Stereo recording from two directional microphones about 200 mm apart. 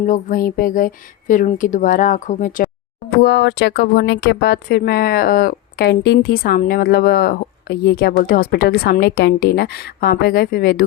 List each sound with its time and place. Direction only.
0.0 s speech: 40° left (ahead or behind)
3.2 s speech: 55° left (ahead or behind)